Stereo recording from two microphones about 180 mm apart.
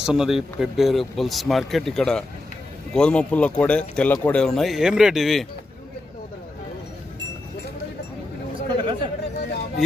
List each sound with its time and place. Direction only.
0.0 s speech: 5° right (ahead or behind)
8.6 s chatter: 25° right (ahead or behind)